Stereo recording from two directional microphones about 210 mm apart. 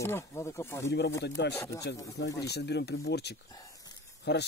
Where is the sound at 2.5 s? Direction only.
50° left (ahead or behind).